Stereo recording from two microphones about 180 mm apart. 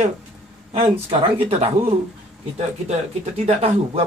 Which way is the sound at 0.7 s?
30° right (ahead or behind).